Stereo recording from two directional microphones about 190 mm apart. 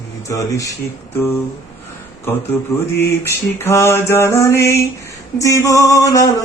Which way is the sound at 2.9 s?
15° left (ahead or behind).